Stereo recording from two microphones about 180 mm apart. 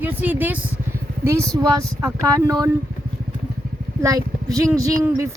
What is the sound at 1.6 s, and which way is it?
Speech, 20° right (ahead or behind).